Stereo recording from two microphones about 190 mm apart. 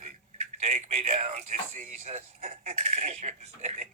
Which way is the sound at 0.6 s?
35° right (ahead or behind).